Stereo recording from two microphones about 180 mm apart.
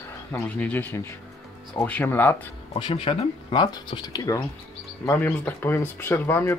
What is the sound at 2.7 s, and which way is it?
Speech, 30° left (ahead or behind).